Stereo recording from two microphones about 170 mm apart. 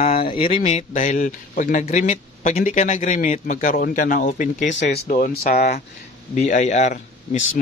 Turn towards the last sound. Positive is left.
turn(degrees=45)  # may be behind; listen again after turning